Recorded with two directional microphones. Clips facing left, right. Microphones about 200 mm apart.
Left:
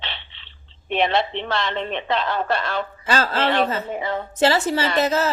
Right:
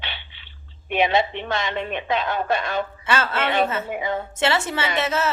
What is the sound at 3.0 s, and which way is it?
Speech, 35° left (ahead or behind).